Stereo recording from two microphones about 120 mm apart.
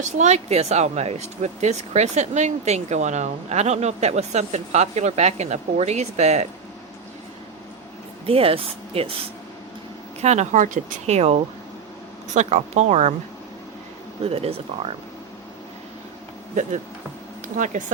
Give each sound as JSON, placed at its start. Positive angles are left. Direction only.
{"t": 0.0, "sound": "speech", "side_deg": -75}
{"t": 8.3, "sound": "speech", "side_deg": -55}
{"t": 10.2, "sound": "speech", "side_deg": -70}
{"t": 14.3, "sound": "speech", "side_deg": -55}
{"t": 17.6, "sound": "speech", "side_deg": -90}